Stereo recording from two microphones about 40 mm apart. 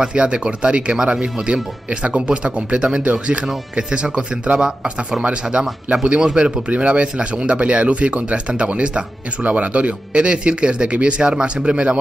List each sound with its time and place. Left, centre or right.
0.0 s speech: right
5.9 s speech: right
6.2 s speech: right